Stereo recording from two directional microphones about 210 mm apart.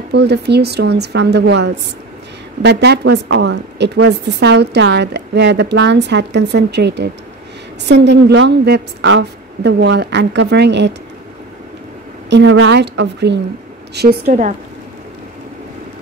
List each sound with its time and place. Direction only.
0.1 s a woman's voice: 55° right (ahead or behind)
12.3 s a woman's voice: 60° right (ahead or behind)
13.9 s a woman's voice: 45° right (ahead or behind)